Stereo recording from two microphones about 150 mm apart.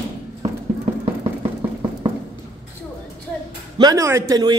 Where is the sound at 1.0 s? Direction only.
40° right (ahead or behind).